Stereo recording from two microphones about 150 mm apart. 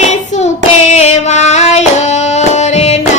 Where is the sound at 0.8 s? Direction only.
50° left (ahead or behind).